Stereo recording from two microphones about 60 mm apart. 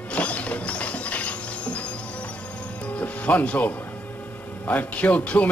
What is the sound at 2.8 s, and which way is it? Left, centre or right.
Music, left.